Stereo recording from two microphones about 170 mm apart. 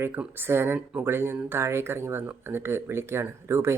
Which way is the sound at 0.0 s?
10° right (ahead or behind).